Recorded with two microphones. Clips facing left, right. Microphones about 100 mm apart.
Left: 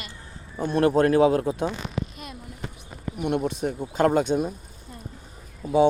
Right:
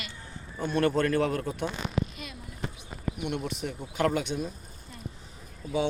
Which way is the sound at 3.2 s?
45° left (ahead or behind).